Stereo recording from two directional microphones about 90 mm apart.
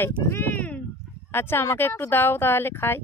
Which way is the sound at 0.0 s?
20° left (ahead or behind).